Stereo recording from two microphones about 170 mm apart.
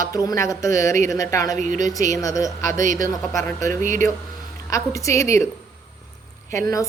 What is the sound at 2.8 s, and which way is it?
Speech, 50° right (ahead or behind).